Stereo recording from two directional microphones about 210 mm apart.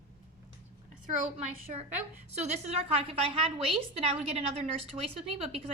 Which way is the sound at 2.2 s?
30° right (ahead or behind).